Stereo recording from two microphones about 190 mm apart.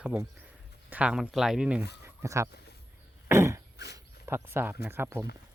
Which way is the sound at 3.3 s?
15° right (ahead or behind).